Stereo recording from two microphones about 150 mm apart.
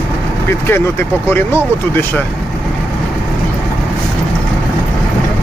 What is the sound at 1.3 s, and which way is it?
Speech, 15° left (ahead or behind).